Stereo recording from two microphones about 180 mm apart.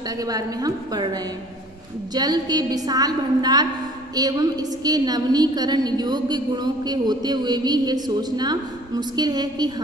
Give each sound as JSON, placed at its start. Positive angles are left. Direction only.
{"t": 0.2, "sound": "a woman's voice", "side_deg": -20}